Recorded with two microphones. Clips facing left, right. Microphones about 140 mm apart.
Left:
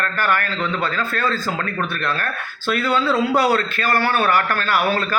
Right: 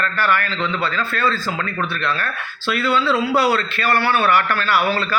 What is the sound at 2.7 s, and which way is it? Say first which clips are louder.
A man's voice: even; 45° left (ahead or behind).